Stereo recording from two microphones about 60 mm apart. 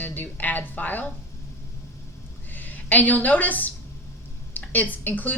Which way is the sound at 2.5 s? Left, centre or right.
Left.